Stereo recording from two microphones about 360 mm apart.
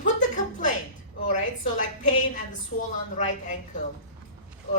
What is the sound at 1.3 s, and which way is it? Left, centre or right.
A woman's voice, left.